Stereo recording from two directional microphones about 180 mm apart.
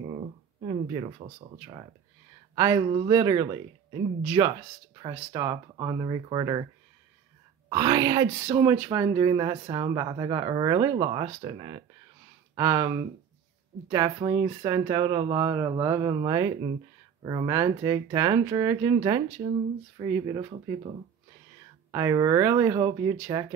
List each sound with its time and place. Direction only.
0.6 s speech: 30° right (ahead or behind)
7.7 s speech: 20° right (ahead or behind)
21.9 s speech: 15° right (ahead or behind)